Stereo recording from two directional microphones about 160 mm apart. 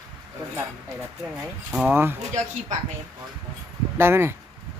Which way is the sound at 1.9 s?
15° right (ahead or behind).